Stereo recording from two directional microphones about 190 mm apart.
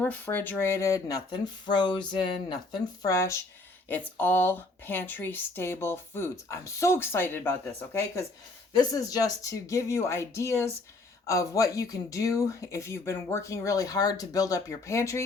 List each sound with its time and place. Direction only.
0.0 s speech: 10° left (ahead or behind)